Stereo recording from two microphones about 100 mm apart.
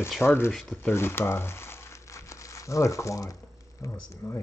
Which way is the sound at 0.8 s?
25° left (ahead or behind).